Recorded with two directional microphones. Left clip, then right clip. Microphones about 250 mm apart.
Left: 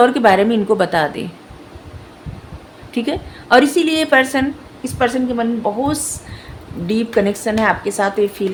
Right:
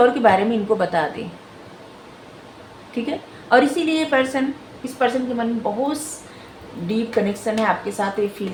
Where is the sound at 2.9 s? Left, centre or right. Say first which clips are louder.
Left 5 dB; left.